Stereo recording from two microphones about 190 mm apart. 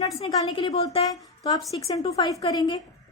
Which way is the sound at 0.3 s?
25° left (ahead or behind).